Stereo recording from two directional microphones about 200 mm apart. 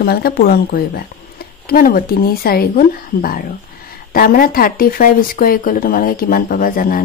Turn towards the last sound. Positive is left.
turn(degrees=45)  # may be behind; listen again after turning